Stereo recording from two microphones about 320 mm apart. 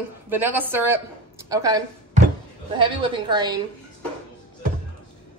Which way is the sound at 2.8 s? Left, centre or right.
Centre.